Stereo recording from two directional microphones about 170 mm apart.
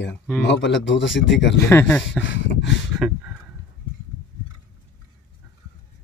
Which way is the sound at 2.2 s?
90° left.